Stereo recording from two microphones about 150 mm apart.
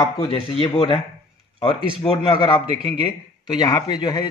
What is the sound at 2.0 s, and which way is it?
A man's voice, 35° left (ahead or behind).